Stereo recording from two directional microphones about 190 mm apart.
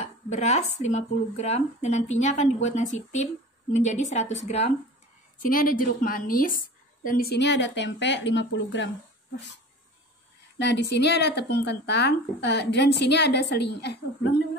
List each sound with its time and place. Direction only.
0.0 s speech: 35° left (ahead or behind)
5.4 s a woman's voice: 50° left (ahead or behind); by 8.9 s 70° left (ahead or behind)
10.6 s speech: 65° left (ahead or behind)